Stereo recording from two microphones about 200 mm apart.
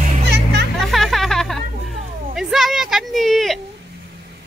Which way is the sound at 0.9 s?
Centre (ahead or behind).